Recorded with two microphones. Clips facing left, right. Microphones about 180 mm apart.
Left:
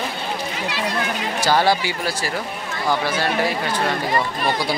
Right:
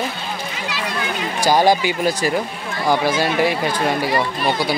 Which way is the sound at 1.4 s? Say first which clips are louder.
Right 3 dB; 15° right (ahead or behind).